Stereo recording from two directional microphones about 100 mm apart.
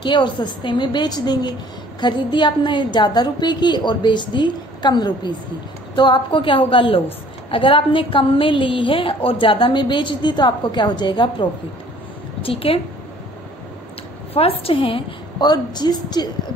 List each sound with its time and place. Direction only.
0.0 s a woman's voice: 50° left (ahead or behind)
12.4 s a woman's voice: 70° left (ahead or behind)
14.3 s a woman's voice: 75° left (ahead or behind); by 16.3 s 45° left (ahead or behind)